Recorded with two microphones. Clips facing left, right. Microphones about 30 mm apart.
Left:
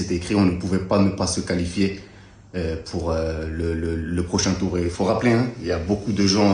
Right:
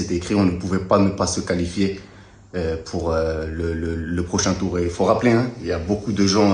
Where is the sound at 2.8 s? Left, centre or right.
Left.